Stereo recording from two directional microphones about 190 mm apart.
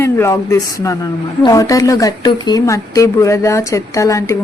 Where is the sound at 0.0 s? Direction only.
15° left (ahead or behind).